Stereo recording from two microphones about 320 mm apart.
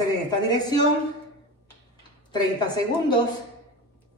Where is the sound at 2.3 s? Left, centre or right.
Centre.